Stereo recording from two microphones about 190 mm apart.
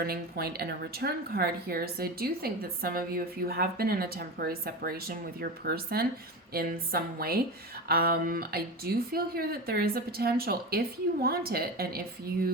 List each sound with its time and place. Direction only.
0.0 s a woman's voice: 55° right (ahead or behind)